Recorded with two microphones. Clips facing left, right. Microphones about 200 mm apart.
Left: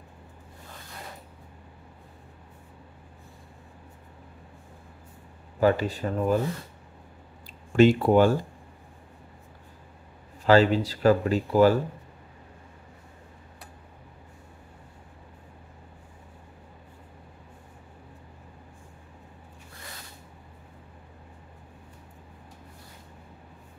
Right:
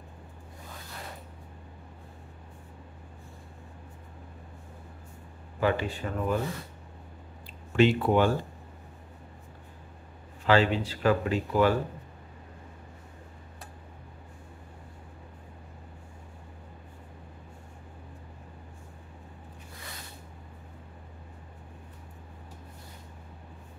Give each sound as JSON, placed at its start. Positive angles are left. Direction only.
{"t": 5.6, "sound": "speech", "side_deg": 40}
{"t": 7.7, "sound": "speech", "side_deg": 40}
{"t": 10.4, "sound": "speech", "side_deg": 40}